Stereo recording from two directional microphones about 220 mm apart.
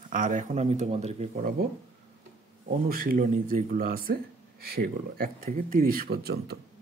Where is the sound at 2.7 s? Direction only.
40° right (ahead or behind).